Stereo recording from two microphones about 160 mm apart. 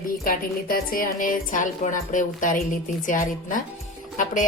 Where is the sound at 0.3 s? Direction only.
60° left (ahead or behind).